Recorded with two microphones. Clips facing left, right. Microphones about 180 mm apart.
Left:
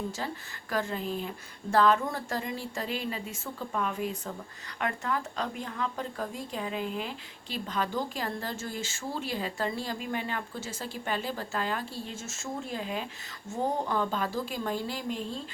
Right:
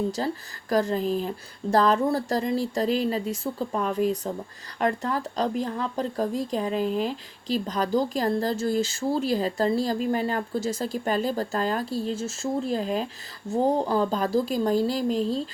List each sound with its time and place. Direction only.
0.2 s speech: 35° right (ahead or behind)